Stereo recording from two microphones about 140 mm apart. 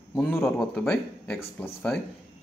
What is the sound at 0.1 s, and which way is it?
Speech, 15° left (ahead or behind).